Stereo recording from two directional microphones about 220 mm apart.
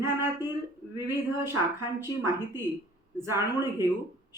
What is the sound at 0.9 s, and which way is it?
A woman's voice, 10° right (ahead or behind).